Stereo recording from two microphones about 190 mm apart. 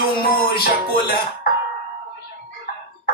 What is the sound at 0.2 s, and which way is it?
Music, 50° left (ahead or behind).